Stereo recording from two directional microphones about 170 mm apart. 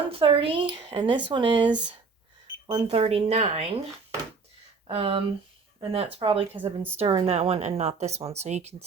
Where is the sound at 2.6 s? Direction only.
30° right (ahead or behind).